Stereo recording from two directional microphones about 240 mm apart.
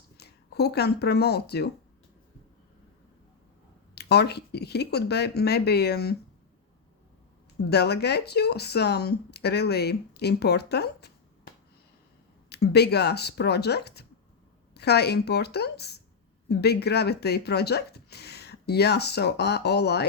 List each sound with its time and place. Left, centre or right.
0.2 s speech: left
3.9 s speech: left
7.7 s speech: left
12.5 s speech: left